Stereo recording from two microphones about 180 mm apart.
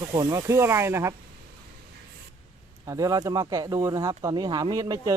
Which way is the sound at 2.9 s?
20° right (ahead or behind).